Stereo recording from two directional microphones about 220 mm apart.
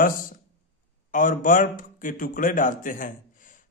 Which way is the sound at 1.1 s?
40° left (ahead or behind).